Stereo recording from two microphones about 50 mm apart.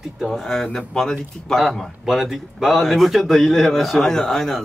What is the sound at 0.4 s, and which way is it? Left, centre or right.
Speech, centre.